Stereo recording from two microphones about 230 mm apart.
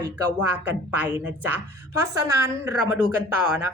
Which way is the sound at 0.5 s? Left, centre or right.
Centre.